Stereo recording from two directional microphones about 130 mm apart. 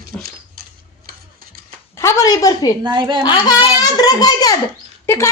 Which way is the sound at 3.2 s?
35° left (ahead or behind).